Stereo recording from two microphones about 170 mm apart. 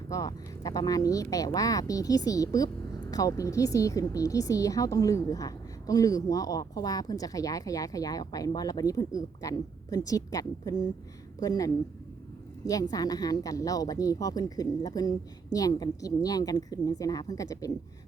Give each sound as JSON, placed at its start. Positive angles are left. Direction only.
{"t": 0.1, "sound": "a woman's voice", "side_deg": 20}